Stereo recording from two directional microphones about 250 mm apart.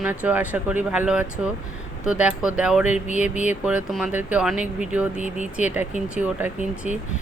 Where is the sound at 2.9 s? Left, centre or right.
Left.